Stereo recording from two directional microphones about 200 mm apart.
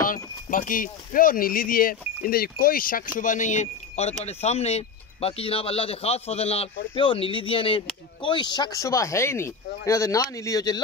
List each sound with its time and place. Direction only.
0.0 s speech: 45° left (ahead or behind); by 10.8 s 20° left (ahead or behind)